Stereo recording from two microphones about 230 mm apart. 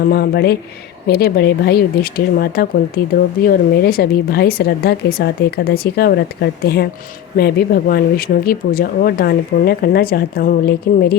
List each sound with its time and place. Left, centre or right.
0.0 s speech: left